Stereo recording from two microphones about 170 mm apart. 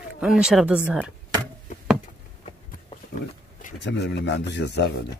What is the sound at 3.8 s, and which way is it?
Speech, 85° left.